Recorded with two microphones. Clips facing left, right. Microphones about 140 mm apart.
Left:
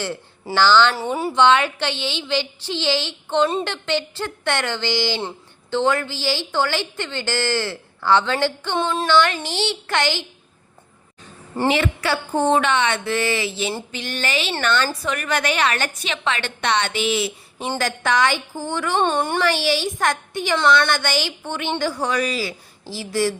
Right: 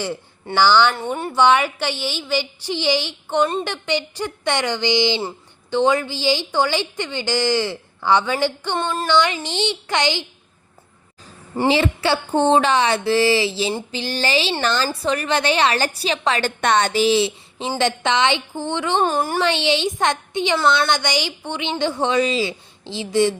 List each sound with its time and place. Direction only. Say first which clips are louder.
0.5 s a woman's voice: even; 15° right (ahead or behind)
0.9 s speech: left 2 dB; 5° left (ahead or behind)
1.3 s a woman's voice: even; 10° right (ahead or behind)
8.8 s speech: left 3 dB; centre (ahead or behind)
9.0 s a woman's voice: even; 15° right (ahead or behind)
11.7 s a woman's voice: right 4 dB; 30° right (ahead or behind)
18.9 s speech: even; 5° right (ahead or behind)
19.4 s a woman's voice: right 1 dB; 20° right (ahead or behind)